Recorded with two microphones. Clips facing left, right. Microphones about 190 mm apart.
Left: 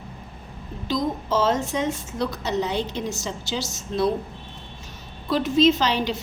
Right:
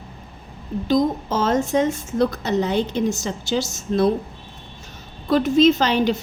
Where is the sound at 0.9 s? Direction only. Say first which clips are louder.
Right 5 dB; 50° right (ahead or behind).